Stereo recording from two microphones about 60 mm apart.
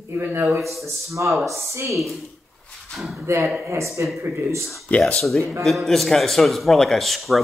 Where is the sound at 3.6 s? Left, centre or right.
Right.